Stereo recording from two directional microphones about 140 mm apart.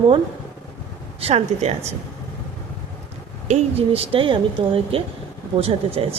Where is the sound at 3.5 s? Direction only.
45° right (ahead or behind).